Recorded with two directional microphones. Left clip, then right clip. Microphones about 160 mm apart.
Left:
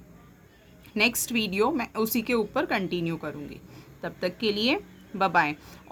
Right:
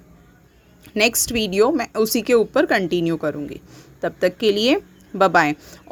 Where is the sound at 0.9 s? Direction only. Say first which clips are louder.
Right 6 dB; 40° right (ahead or behind).